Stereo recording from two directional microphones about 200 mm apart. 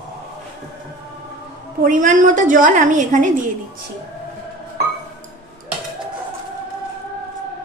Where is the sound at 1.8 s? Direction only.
40° right (ahead or behind).